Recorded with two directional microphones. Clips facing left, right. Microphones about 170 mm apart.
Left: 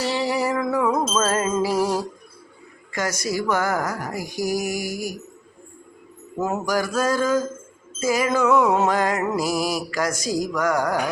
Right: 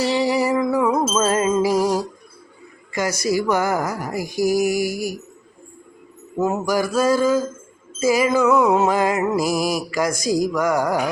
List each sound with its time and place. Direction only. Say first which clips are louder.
0.0 s music: right 4 dB; 10° right (ahead or behind)
6.4 s music: right 3 dB; 5° right (ahead or behind)